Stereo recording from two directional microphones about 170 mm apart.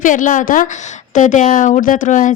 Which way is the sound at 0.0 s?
50° left (ahead or behind).